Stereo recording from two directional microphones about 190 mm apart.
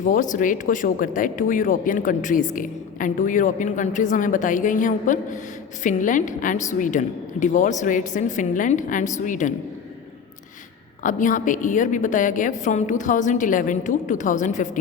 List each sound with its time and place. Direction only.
0.0 s a woman's voice: 40° left (ahead or behind)
11.0 s speech: 45° left (ahead or behind)